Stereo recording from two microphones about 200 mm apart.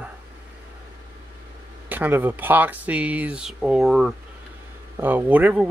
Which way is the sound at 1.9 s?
10° right (ahead or behind).